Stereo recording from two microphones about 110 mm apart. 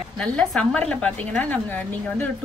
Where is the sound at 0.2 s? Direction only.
5° left (ahead or behind).